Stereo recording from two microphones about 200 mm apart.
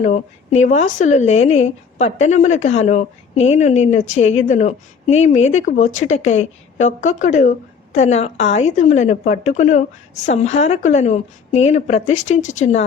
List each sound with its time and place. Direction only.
0.0 s a woman's voice: 35° left (ahead or behind)